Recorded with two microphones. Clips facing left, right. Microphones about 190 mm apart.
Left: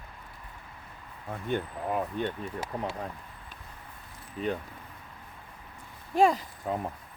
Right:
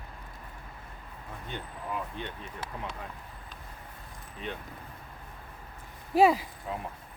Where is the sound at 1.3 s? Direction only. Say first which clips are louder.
Left 10 dB; 50° left (ahead or behind).